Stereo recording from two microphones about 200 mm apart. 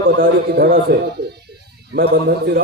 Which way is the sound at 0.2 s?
50° right (ahead or behind).